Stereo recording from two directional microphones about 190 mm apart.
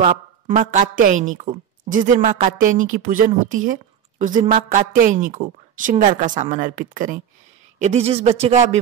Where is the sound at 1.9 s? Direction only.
45° right (ahead or behind).